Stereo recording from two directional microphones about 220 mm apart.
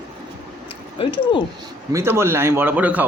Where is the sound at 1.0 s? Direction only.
20° left (ahead or behind).